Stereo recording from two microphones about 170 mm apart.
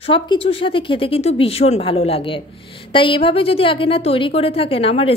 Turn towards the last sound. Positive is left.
turn(degrees=35)  # may be behind; listen again after turning